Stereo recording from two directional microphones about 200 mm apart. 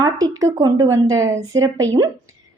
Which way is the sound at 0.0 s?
20° right (ahead or behind).